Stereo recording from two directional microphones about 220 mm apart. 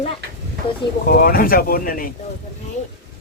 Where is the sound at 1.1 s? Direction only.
40° left (ahead or behind).